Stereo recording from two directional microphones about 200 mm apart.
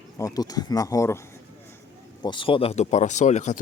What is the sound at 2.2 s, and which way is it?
Speech, 25° left (ahead or behind).